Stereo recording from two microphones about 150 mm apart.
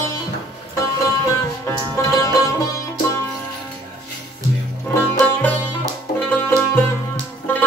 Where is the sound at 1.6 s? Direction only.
20° left (ahead or behind).